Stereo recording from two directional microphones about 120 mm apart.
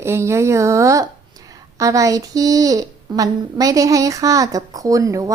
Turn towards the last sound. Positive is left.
turn(degrees=-30)  # may be behind; listen again after turning